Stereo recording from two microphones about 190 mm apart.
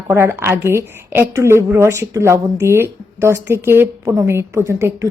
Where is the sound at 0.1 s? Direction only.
10° right (ahead or behind).